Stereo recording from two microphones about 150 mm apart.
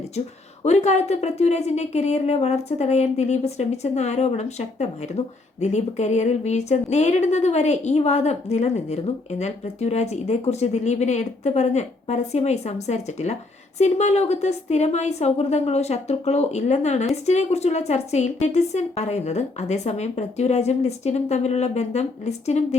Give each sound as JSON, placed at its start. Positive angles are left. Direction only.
{"t": 0.6, "sound": "speech", "side_deg": 50}